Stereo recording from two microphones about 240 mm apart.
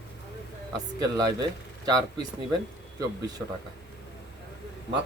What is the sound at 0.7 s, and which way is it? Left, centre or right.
Speech, centre.